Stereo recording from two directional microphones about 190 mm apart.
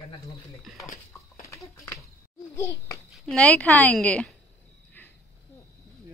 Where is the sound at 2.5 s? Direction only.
15° left (ahead or behind).